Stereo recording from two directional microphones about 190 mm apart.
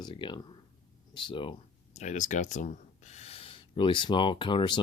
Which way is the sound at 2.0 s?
40° left (ahead or behind).